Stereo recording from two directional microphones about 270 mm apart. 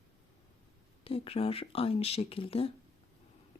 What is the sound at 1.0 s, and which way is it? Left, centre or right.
Speech, left.